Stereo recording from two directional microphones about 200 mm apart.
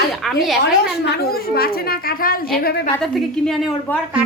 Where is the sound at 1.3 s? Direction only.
50° left (ahead or behind).